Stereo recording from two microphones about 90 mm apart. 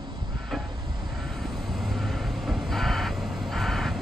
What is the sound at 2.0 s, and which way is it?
Vehicle, centre (ahead or behind).